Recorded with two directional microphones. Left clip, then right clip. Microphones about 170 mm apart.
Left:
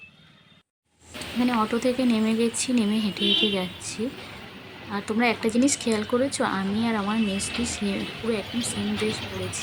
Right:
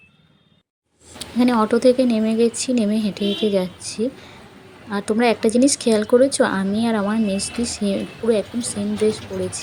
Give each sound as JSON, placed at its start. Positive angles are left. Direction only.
{"t": 1.4, "sound": "speech", "side_deg": -30}